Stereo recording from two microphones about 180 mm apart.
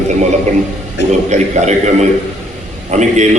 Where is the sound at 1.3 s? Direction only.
40° right (ahead or behind).